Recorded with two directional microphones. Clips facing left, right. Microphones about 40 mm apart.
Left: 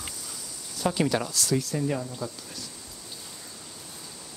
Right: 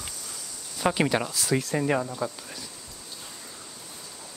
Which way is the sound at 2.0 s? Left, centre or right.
Right.